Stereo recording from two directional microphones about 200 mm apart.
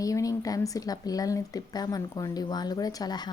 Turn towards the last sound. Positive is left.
turn(degrees=20)  # may be behind; listen again after turning